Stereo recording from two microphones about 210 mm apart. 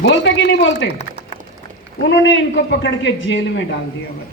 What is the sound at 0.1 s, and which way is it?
Speech, 55° left (ahead or behind).